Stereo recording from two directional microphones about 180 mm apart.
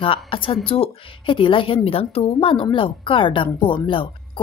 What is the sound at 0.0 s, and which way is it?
A woman's voice, 30° left (ahead or behind).